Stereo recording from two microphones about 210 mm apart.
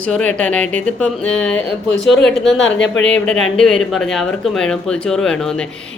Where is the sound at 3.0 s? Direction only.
5° left (ahead or behind).